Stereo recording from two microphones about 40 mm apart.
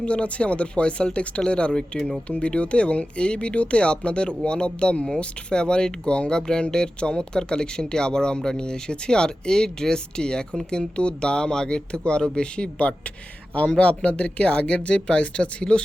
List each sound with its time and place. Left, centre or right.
0.0 s speech: left